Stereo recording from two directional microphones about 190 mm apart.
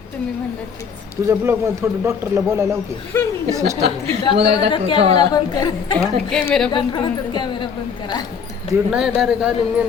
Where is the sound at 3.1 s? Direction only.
15° left (ahead or behind).